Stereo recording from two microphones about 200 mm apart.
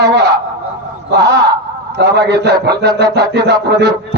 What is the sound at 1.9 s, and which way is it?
A man's voice, 55° right (ahead or behind).